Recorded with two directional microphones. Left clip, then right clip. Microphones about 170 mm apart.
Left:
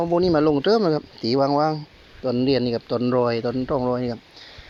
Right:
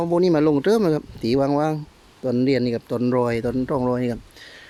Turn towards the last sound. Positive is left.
turn(degrees=-35)  # may be behind; listen again after turning